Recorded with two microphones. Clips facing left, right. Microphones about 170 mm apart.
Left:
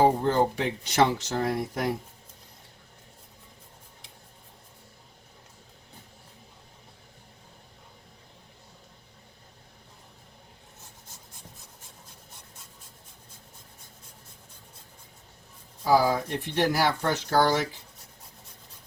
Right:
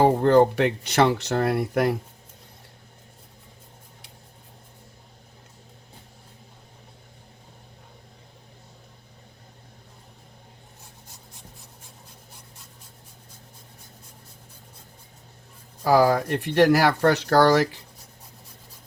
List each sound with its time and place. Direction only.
0.0 s speech: 65° right (ahead or behind)
15.8 s speech: 70° right (ahead or behind)